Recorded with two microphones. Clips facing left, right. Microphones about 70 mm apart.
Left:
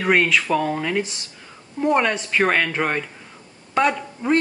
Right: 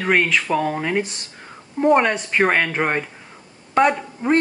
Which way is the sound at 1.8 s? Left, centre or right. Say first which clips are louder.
Right 3 dB; right.